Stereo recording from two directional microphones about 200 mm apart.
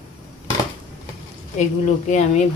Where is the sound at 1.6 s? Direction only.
35° left (ahead or behind).